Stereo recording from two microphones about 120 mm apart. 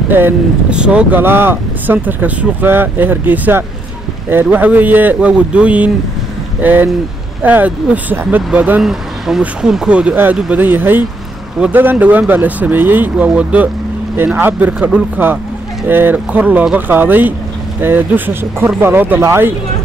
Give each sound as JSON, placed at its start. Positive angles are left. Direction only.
{"t": 0.1, "sound": "speech", "side_deg": -15}